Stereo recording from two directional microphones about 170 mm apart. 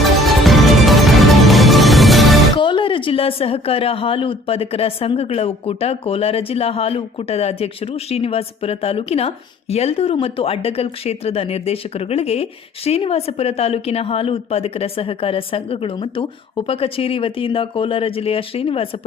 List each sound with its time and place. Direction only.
0.3 s music: centre (ahead or behind)
2.6 s a woman's voice: 30° left (ahead or behind)